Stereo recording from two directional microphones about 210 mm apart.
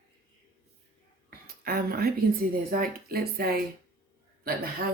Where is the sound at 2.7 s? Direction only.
45° right (ahead or behind).